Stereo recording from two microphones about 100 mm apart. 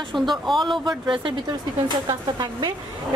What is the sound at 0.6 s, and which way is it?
A woman's voice, 50° right (ahead or behind).